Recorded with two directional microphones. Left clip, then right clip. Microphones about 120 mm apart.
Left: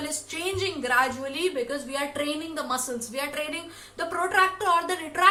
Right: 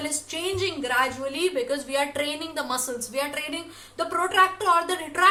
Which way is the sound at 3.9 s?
20° right (ahead or behind).